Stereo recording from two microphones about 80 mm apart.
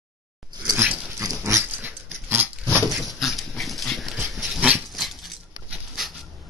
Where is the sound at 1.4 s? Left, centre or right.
Right.